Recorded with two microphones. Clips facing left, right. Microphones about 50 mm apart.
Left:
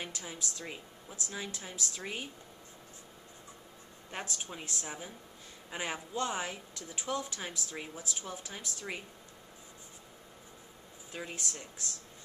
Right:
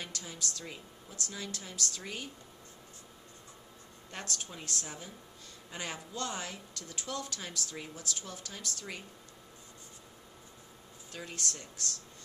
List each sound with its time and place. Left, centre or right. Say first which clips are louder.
0.0 s speech: left 1 dB; centre
4.1 s a woman's voice: left 1 dB; centre
11.1 s a woman's voice: even; centre